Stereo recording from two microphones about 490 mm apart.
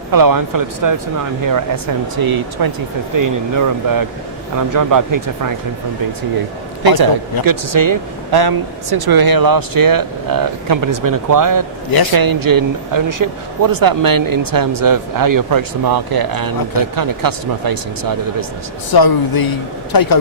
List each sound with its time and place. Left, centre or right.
0.1 s speech: right
6.8 s speech: right
18.9 s speech: left